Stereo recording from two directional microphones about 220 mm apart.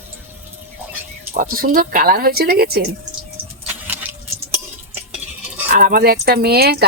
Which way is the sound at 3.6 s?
5° right (ahead or behind).